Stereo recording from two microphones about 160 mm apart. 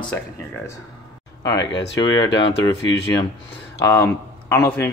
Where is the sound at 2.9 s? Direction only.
90° left.